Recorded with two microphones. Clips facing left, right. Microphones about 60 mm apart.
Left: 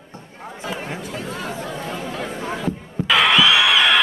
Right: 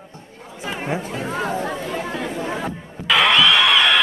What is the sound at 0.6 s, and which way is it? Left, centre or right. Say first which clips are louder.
Chatter: right 4 dB; right.